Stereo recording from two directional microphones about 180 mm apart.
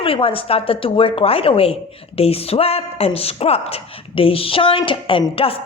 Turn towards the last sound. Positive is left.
turn(degrees=30)  # may be behind; listen again after turning